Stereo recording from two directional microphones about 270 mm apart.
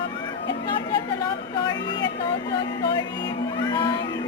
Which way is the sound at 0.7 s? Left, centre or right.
Centre.